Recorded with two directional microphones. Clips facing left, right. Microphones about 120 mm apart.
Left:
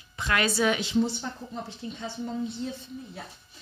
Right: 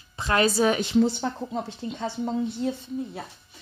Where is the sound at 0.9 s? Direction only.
70° right (ahead or behind).